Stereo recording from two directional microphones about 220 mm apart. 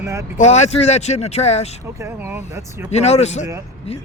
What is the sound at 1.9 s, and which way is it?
Speech, 10° right (ahead or behind).